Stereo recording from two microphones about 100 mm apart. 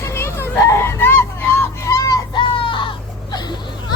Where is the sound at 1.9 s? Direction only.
35° left (ahead or behind).